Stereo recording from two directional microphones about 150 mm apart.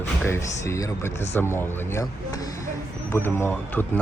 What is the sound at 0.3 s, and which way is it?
Speech, 20° left (ahead or behind).